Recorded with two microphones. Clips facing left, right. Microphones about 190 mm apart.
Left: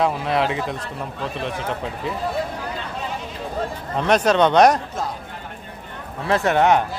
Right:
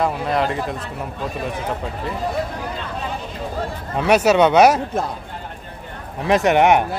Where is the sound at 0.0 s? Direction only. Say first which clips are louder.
Even; centre (ahead or behind).